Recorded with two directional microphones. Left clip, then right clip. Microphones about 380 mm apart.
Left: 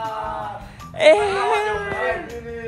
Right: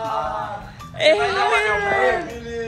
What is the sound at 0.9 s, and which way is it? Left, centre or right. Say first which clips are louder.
Speech: left 2 dB; centre.